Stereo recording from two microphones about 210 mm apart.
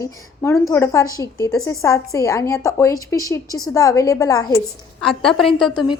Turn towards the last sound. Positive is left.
turn(degrees=0)  # may be behind; listen again after turning